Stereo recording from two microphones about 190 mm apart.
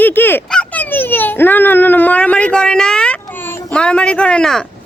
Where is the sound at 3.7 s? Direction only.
5° left (ahead or behind).